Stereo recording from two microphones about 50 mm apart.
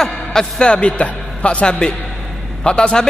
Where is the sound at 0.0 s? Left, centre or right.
Centre.